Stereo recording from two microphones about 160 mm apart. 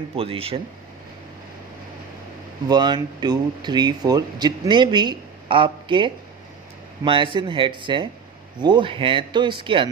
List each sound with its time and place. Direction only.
0.1 s speech: 35° right (ahead or behind)
2.7 s speech: 25° right (ahead or behind)